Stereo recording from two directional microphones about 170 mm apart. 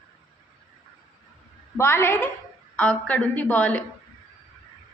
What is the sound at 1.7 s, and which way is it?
A woman's voice, 15° left (ahead or behind).